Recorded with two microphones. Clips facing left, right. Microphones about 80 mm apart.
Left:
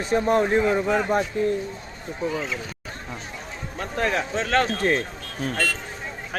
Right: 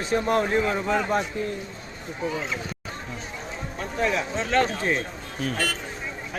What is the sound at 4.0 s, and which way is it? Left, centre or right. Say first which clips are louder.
Speech: left 1 dB; left.